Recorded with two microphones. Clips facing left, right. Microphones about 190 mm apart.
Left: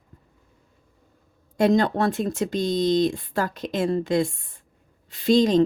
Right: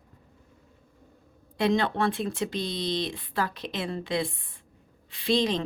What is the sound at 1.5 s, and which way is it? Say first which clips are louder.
A woman's voice: left 5 dB; 45° left (ahead or behind).